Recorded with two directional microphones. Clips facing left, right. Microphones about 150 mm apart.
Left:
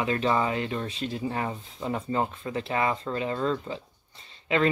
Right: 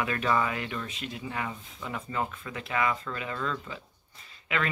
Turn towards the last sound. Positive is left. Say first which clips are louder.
# left 7 dB
turn(degrees=30)  # may be behind; listen again after turning